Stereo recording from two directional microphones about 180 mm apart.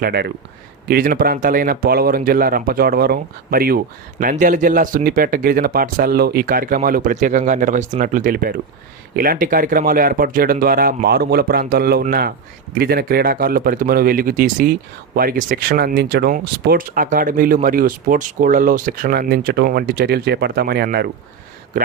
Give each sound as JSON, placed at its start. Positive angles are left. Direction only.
{"t": 0.0, "sound": "speech", "side_deg": -60}
{"t": 16.6, "sound": "speech", "side_deg": -50}